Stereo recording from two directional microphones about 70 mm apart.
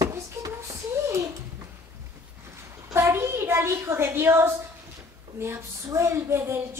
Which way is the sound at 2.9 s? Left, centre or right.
Right.